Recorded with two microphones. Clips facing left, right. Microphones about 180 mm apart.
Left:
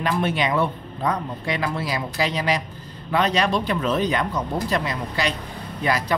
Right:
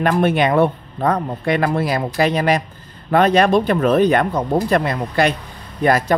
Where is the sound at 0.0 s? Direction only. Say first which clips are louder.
Right 7 dB; 55° right (ahead or behind).